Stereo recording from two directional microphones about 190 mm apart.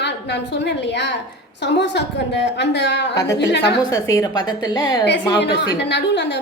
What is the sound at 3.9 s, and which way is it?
A woman's voice, 15° left (ahead or behind).